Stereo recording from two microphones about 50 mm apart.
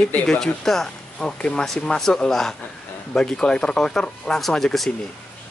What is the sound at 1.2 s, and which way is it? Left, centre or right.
Speech, centre.